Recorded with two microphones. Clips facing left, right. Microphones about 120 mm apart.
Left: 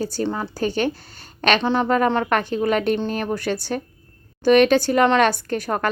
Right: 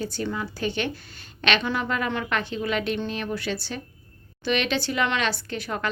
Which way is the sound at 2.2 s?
50° left (ahead or behind).